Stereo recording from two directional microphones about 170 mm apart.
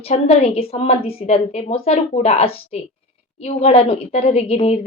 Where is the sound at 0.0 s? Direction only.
40° left (ahead or behind).